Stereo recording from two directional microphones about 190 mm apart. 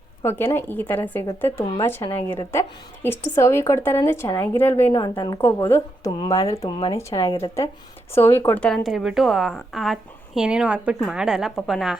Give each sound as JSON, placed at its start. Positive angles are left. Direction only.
{"t": 0.2, "sound": "a woman's voice", "side_deg": 10}